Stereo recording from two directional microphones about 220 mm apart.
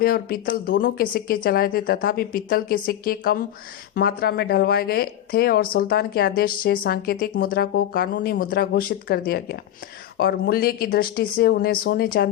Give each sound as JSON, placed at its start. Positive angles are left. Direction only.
{"t": 0.0, "sound": "a woman's voice", "side_deg": 40}